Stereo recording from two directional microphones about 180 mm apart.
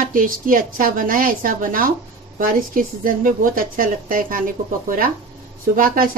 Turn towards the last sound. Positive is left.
turn(degrees=-50)  # may be behind; listen again after turning